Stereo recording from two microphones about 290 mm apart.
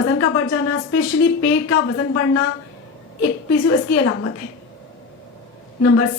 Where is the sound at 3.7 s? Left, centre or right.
Left.